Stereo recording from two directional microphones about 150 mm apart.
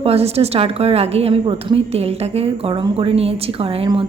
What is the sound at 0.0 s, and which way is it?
A woman's voice, 40° right (ahead or behind).